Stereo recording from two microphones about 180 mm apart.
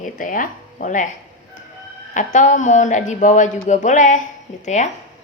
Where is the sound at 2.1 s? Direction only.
45° left (ahead or behind).